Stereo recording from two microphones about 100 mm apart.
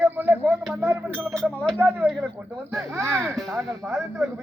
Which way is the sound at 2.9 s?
25° right (ahead or behind).